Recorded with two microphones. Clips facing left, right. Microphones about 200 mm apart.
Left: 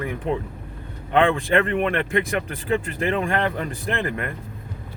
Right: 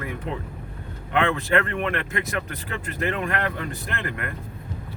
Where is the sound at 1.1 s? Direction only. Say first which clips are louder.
Left 4 dB; 30° left (ahead or behind).